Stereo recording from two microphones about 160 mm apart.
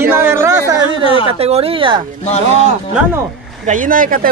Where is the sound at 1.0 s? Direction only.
35° left (ahead or behind).